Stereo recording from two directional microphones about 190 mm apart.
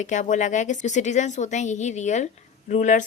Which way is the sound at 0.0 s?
40° left (ahead or behind).